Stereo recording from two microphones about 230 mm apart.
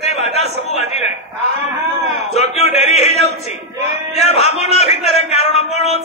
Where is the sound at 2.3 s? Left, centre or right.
Left.